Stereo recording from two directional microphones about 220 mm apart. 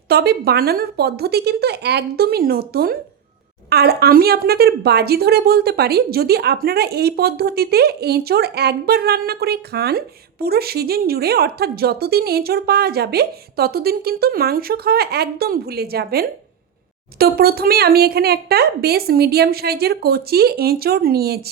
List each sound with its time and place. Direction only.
0.1 s a woman's voice: 45° right (ahead or behind)